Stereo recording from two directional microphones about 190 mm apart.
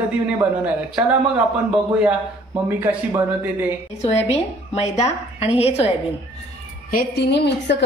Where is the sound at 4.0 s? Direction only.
35° left (ahead or behind).